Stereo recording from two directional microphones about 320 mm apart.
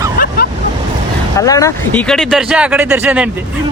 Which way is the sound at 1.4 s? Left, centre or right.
Centre.